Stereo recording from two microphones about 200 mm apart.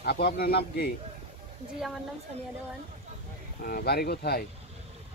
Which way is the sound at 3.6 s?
50° left (ahead or behind).